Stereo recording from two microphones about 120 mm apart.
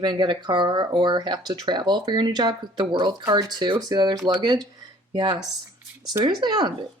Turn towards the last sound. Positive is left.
turn(degrees=-35)  # may be behind; listen again after turning